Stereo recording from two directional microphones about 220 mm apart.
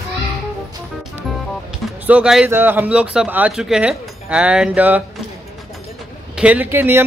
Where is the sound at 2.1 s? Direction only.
5° right (ahead or behind).